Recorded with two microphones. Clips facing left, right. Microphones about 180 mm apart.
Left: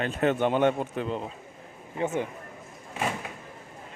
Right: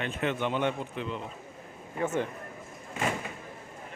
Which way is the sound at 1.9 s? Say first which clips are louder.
Left 1 dB; 15° left (ahead or behind).